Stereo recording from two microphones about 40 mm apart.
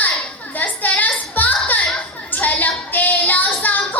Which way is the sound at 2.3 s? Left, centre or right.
Left.